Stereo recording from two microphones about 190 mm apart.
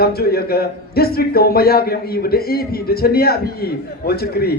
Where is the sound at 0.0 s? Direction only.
55° left (ahead or behind).